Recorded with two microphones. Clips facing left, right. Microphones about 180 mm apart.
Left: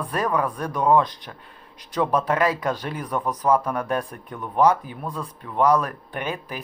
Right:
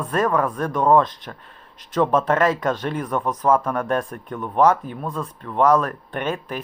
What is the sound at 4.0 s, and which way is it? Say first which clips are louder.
Speech: right 3 dB; 50° right (ahead or behind).